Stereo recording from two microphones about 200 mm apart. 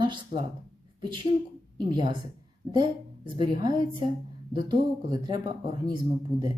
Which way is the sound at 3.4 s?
25° right (ahead or behind).